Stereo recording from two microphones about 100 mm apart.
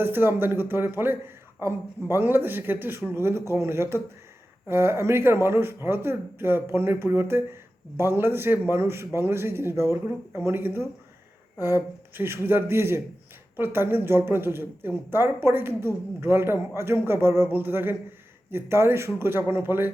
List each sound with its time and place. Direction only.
0.0 s a man's voice: 20° right (ahead or behind)